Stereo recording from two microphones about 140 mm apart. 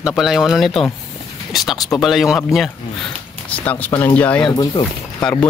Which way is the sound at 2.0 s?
Centre (ahead or behind).